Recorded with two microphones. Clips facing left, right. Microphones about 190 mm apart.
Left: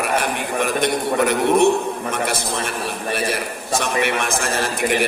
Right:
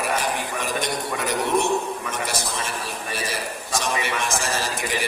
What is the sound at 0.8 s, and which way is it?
Mantra, 60° left (ahead or behind).